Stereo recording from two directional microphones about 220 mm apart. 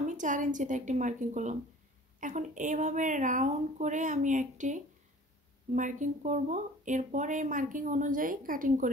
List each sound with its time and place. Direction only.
0.0 s speech: 35° right (ahead or behind)